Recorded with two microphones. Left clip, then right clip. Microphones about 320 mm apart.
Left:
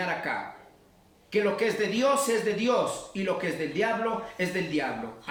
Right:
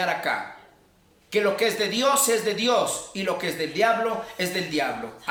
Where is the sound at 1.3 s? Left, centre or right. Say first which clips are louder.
Right 4 dB; centre.